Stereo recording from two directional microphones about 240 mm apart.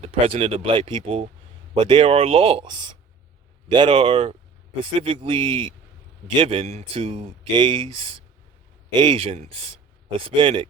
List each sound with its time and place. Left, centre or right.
0.0 s speech: right